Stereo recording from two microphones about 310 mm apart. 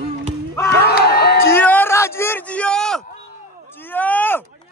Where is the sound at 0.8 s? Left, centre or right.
Left.